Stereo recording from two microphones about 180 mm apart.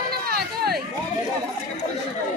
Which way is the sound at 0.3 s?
60° right (ahead or behind).